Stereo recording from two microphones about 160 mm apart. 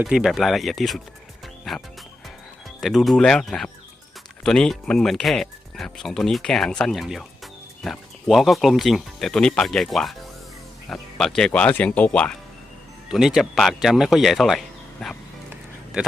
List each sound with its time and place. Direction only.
0.0 s speech: 5° right (ahead or behind)
2.8 s speech: centre (ahead or behind)
11.2 s speech: 5° left (ahead or behind)